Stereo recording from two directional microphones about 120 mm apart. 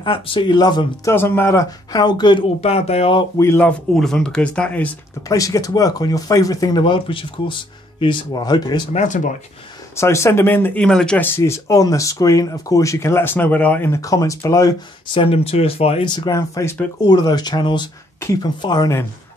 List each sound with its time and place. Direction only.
0.0 s speech: 45° left (ahead or behind)
1.1 s speech: 20° left (ahead or behind); by 2.4 s 35° left (ahead or behind)
2.6 s speech: 60° left (ahead or behind)
3.3 s speech: 20° left (ahead or behind)
3.9 s speech: 5° left (ahead or behind)
5.3 s speech: 30° left (ahead or behind)
8.9 s speech: 90° left
9.9 s speech: 25° left (ahead or behind); by 11.2 s 5° left (ahead or behind)
11.3 s speech: 20° left (ahead or behind)
15.1 s speech: 55° left (ahead or behind)
16.2 s speech: 30° left (ahead or behind)